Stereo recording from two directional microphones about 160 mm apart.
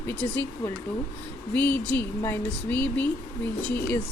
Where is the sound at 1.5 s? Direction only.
10° left (ahead or behind).